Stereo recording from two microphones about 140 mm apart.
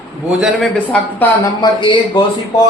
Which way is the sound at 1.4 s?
35° left (ahead or behind).